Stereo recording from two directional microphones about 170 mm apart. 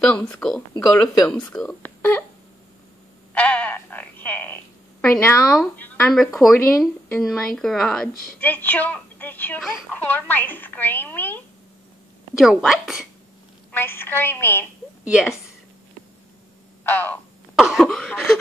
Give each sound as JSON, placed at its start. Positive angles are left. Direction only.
{"t": 0.3, "sound": "speech", "side_deg": 5}
{"t": 3.3, "sound": "a sound", "side_deg": 10}
{"t": 5.2, "sound": "speech", "side_deg": 15}
{"t": 9.6, "sound": "speech", "side_deg": 0}
{"t": 9.9, "sound": "speech", "side_deg": 10}
{"t": 12.4, "sound": "speech", "side_deg": 0}
{"t": 13.7, "sound": "speech", "side_deg": 10}
{"t": 15.0, "sound": "speech", "side_deg": -5}
{"t": 16.8, "sound": "speech", "side_deg": 10}
{"t": 17.6, "sound": "speech", "side_deg": 0}